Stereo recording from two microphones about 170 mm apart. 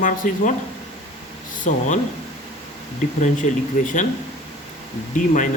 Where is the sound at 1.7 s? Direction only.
45° left (ahead or behind).